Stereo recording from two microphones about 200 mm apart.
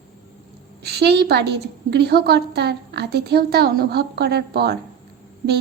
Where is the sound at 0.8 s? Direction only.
55° right (ahead or behind).